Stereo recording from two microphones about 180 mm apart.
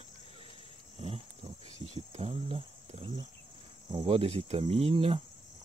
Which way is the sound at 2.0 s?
35° right (ahead or behind).